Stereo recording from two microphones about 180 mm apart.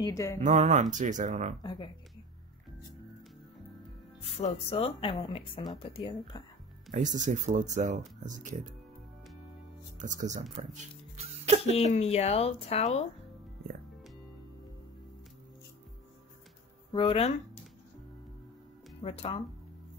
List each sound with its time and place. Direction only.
0.0 s speech: 15° left (ahead or behind)
0.4 s speech: 45° right (ahead or behind)
1.6 s speech: 25° left (ahead or behind)
4.4 s speech: 35° left (ahead or behind)
6.9 s speech: 45° right (ahead or behind)
9.9 s speech: 45° right (ahead or behind)
10.5 s music: 35° right (ahead or behind)
11.6 s speech: 35° left (ahead or behind)
16.9 s speech: 30° left (ahead or behind)
18.9 s speech: 30° left (ahead or behind)